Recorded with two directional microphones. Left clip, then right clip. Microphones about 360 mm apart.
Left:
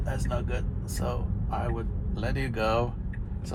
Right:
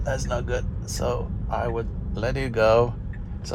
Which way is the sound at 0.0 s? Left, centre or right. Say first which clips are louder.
Right 6 dB; right.